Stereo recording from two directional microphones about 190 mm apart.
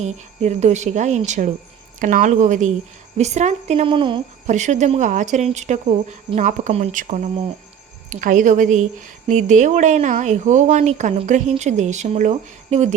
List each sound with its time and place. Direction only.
0.0 s a woman's voice: 35° right (ahead or behind)
4.4 s a woman's voice: 40° right (ahead or behind)